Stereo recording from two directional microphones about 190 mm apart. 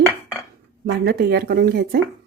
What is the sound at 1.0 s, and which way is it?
Speech, 55° right (ahead or behind).